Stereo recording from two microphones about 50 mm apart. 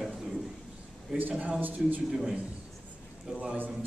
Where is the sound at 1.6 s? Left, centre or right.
Right.